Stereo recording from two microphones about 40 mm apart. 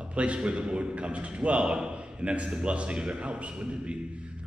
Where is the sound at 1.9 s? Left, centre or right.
Right.